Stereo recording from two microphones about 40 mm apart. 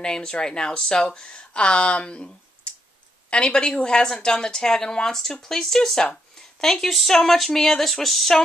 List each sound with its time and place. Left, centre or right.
0.0 s a woman's voice: centre